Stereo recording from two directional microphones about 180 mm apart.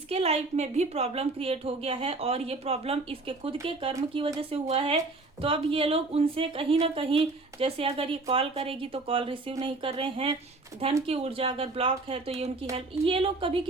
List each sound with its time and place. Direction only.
0.1 s a woman's voice: 35° right (ahead or behind)